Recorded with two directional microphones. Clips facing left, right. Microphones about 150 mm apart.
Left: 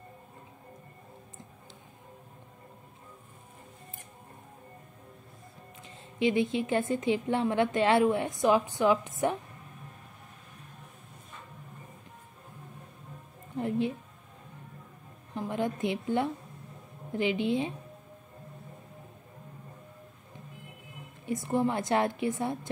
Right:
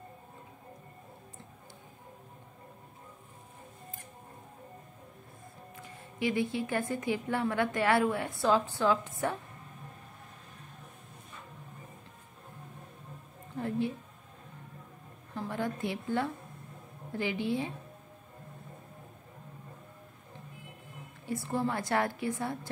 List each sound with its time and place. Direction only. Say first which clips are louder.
5.8 s a woman's voice: left 5 dB; 20° left (ahead or behind)
13.6 s a woman's voice: left 3 dB; 20° left (ahead or behind)
15.3 s a sound: left 3 dB; 20° left (ahead or behind)
17.1 s a woman's voice: left 4 dB; 20° left (ahead or behind)
21.3 s a woman's voice: left 4 dB; 20° left (ahead or behind)